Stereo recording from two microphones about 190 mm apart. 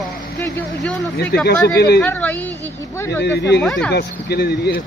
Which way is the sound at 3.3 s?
60° left (ahead or behind).